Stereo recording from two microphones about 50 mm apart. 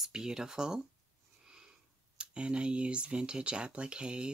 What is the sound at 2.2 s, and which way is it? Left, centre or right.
Speech, right.